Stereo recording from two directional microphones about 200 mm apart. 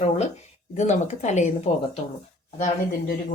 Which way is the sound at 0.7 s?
35° left (ahead or behind).